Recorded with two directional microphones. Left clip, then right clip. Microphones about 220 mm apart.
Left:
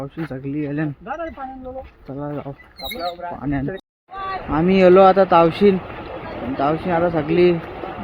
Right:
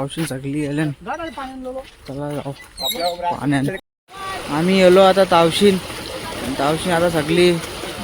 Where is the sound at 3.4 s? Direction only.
20° right (ahead or behind).